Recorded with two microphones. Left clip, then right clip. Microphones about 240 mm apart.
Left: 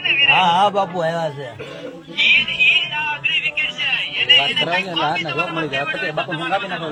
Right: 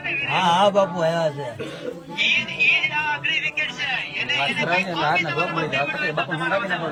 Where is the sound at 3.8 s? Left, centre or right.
Centre.